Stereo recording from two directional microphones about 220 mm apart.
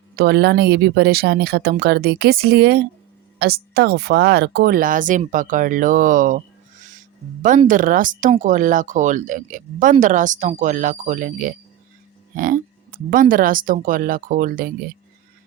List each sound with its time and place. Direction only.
0.2 s speech: 50° right (ahead or behind)
7.7 s speech: 35° right (ahead or behind)